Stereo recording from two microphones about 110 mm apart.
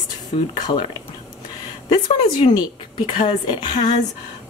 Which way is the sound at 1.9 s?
45° left (ahead or behind).